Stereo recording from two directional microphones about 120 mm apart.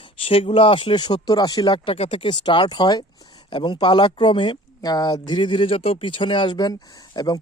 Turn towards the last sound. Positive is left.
turn(degrees=35)  # may be behind; listen again after turning